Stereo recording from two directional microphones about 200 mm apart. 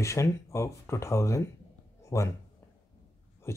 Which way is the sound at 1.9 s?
15° left (ahead or behind).